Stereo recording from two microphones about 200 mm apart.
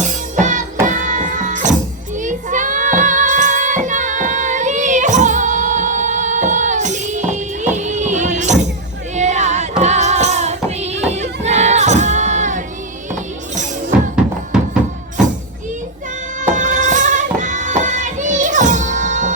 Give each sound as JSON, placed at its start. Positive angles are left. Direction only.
{"t": 0.3, "sound": "music", "side_deg": -40}
{"t": 14.5, "sound": "music", "side_deg": -5}
{"t": 16.6, "sound": "music", "side_deg": -40}